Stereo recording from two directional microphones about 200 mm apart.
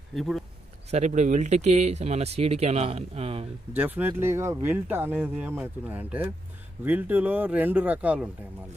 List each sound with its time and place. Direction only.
0.1 s speech: centre (ahead or behind)
0.8 s speech: 35° right (ahead or behind)
3.7 s speech: 10° right (ahead or behind)